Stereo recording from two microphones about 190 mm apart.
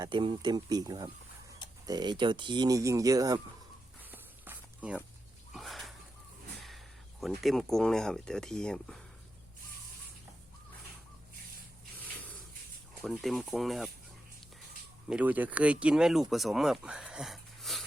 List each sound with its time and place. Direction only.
0.0 s speech: 25° right (ahead or behind)
4.1 s a sound: 10° right (ahead or behind)
6.6 s speech: centre (ahead or behind)
13.0 s speech: centre (ahead or behind)
15.1 s speech: 10° right (ahead or behind)